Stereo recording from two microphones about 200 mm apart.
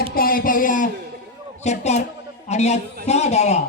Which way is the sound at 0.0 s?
45° left (ahead or behind).